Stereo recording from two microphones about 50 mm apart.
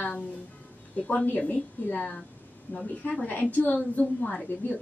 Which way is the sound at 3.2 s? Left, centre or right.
Left.